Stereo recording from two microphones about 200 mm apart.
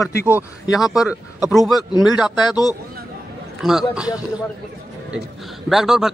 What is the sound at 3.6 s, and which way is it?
Speech, centre (ahead or behind).